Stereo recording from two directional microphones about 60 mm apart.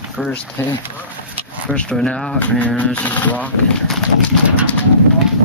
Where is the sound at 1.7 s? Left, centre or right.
Centre.